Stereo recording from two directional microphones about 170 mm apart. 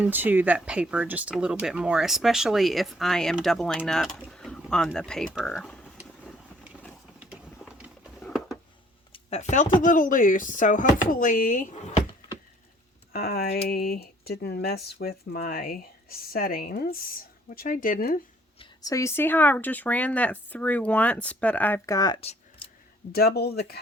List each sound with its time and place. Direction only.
0.0 s speech: 10° right (ahead or behind)
4.3 s a sound: 5° left (ahead or behind)
4.6 s speech: centre (ahead or behind)
7.2 s a sound: 5° right (ahead or behind)
9.1 s speech: 40° left (ahead or behind)
13.1 s speech: 60° left (ahead or behind)
18.6 s speech: 20° left (ahead or behind)
22.2 s a sound: 35° left (ahead or behind)
23.1 s speech: 70° left (ahead or behind)